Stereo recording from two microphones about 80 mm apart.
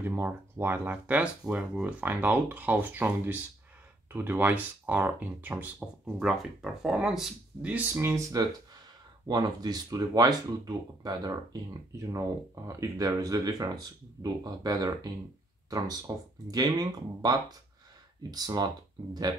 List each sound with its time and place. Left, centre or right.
0.0 s speech: right; by 7.7 s centre
7.9 s speech: right
9.3 s speech: right
12.1 s speech: right
16.1 s speech: right